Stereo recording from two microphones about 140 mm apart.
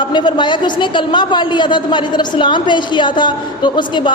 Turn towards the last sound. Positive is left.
turn(degrees=35)  # may be behind; listen again after turning